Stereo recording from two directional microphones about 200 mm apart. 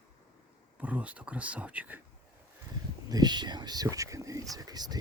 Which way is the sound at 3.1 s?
20° right (ahead or behind).